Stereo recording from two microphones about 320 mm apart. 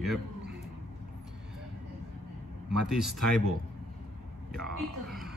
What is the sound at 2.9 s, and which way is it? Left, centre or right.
Speech, centre.